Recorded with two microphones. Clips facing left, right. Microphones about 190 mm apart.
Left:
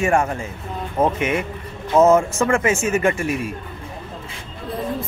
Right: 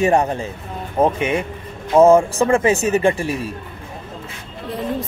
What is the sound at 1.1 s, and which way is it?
Speech, 30° right (ahead or behind).